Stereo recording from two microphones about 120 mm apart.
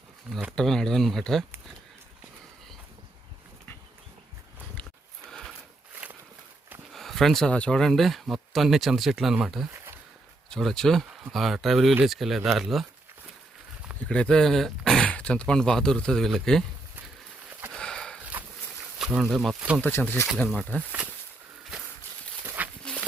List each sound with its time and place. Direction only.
0.5 s speech: 5° left (ahead or behind)
6.9 s speech: centre (ahead or behind)
14.1 s speech: 5° left (ahead or behind)
17.7 s sniff: 5° left (ahead or behind)
18.9 s speech: 5° right (ahead or behind)
19.8 s speech: 15° left (ahead or behind)
22.4 s a sound: 15° right (ahead or behind)
22.8 s a sound: 5° left (ahead or behind)